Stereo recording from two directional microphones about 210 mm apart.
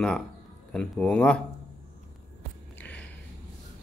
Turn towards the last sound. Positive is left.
turn(degrees=5)  # may be behind; listen again after turning